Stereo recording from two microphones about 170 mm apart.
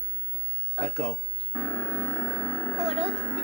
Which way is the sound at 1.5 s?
20° left (ahead or behind).